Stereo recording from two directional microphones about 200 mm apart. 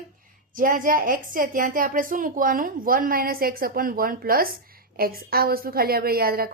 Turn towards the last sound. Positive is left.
turn(degrees=-50)  # may be behind; listen again after turning